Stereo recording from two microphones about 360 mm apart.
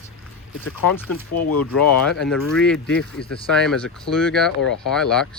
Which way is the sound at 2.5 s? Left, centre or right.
Centre.